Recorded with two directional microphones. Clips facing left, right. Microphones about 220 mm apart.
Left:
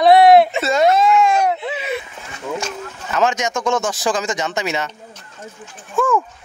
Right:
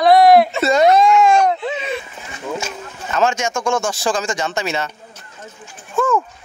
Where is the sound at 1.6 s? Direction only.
10° left (ahead or behind).